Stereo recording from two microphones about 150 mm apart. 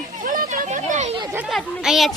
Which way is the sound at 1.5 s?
Centre (ahead or behind).